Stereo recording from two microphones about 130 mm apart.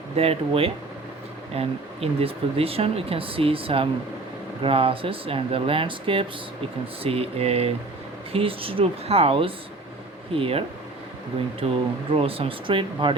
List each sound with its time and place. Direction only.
0.2 s speech: 50° right (ahead or behind)
11.6 s speech: 45° right (ahead or behind)